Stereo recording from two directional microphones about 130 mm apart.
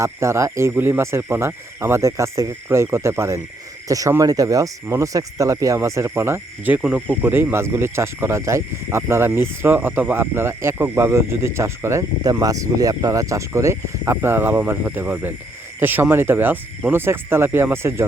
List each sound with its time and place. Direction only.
0.0 s speech: 20° right (ahead or behind)